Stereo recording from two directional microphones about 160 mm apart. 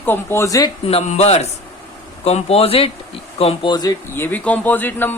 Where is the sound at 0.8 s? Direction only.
40° left (ahead or behind); by 3.9 s 25° left (ahead or behind).